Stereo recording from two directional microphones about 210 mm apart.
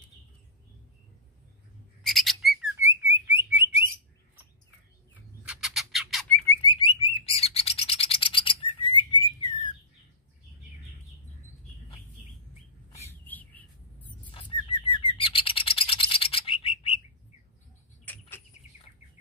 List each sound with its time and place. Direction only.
2.0 s bird: centre (ahead or behind)
5.5 s bird: centre (ahead or behind)
6.6 s bird: 25° left (ahead or behind)
13.2 s a sound: 10° left (ahead or behind)
14.3 s bird: 25° left (ahead or behind)
18.0 s bird: 10° left (ahead or behind)